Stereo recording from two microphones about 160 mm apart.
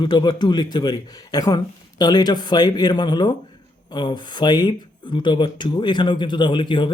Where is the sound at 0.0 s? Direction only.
25° left (ahead or behind).